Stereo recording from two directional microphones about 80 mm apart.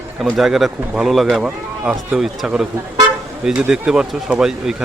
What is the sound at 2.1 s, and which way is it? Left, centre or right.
Speech, centre.